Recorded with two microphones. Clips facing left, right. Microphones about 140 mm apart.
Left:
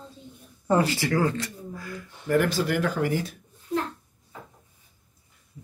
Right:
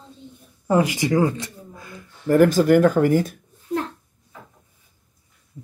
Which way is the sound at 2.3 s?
45° right (ahead or behind).